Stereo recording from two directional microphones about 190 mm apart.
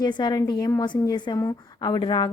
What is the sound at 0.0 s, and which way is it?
Speech, 20° left (ahead or behind).